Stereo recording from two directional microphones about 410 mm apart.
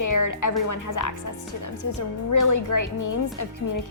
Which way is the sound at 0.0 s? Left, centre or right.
Left.